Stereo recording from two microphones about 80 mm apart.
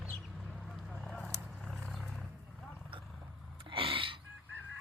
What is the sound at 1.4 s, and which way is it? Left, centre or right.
Vehicle, centre.